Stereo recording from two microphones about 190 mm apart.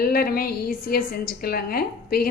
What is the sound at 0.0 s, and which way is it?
A woman's voice, 50° left (ahead or behind).